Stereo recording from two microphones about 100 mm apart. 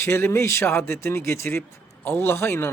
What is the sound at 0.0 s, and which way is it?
A man's voice, 25° left (ahead or behind).